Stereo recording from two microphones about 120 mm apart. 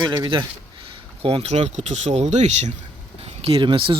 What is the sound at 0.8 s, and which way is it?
Speech, 50° right (ahead or behind).